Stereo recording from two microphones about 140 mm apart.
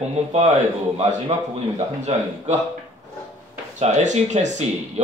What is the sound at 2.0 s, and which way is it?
Speech, 55° right (ahead or behind).